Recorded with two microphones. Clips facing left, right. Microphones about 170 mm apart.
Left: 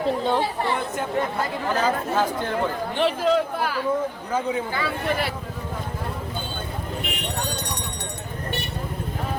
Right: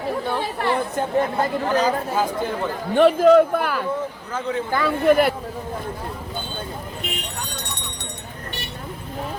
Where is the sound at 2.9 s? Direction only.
50° right (ahead or behind).